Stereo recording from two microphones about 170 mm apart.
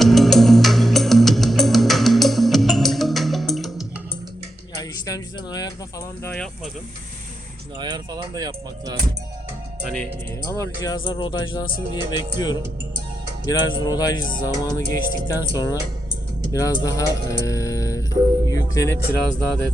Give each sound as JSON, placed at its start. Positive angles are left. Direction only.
{"t": 0.0, "sound": "music", "side_deg": 0}
{"t": 4.8, "sound": "a sound", "side_deg": 20}
{"t": 7.8, "sound": "speech", "side_deg": -25}
{"t": 10.4, "sound": "speech", "side_deg": 15}
{"t": 19.2, "sound": "speech", "side_deg": 5}